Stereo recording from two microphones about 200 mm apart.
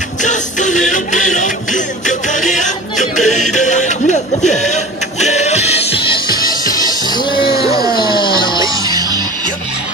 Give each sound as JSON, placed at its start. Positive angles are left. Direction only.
{"t": 0.2, "sound": "music", "side_deg": 40}
{"t": 8.8, "sound": "music", "side_deg": -20}